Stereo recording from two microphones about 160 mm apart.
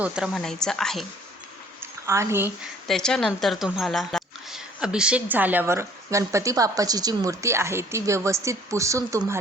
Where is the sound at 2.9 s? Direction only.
5° left (ahead or behind).